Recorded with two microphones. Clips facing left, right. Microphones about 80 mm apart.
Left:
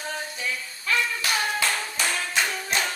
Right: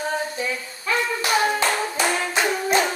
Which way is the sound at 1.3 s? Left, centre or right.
Right.